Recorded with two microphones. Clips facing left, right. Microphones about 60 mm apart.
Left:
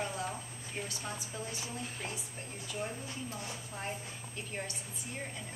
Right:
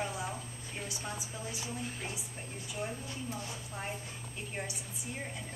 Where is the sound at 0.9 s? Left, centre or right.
Centre.